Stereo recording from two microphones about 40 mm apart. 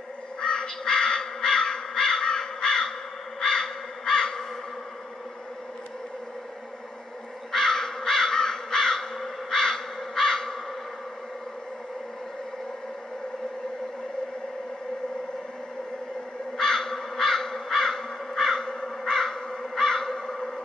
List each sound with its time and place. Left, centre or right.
0.4 s crow: left
7.5 s crow: centre
16.5 s crow: centre